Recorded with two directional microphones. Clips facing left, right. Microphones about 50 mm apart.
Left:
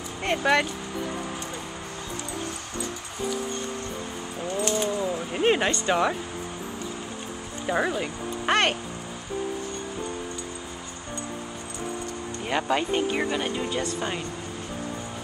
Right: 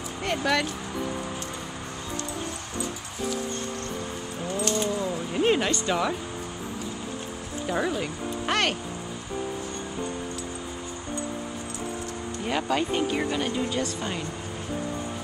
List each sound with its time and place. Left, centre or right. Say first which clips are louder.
0.2 s speech: left 3 dB; left
4.6 s speech: left 1 dB; centre
7.6 s music: left 2 dB; centre
12.4 s speech: left 1 dB; centre